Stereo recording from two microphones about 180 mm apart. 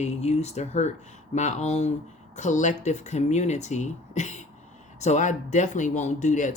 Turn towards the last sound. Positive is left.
turn(degrees=45)  # may be behind; listen again after turning